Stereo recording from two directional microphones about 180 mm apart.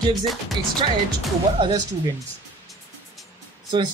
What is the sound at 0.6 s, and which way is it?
Speech, 25° right (ahead or behind).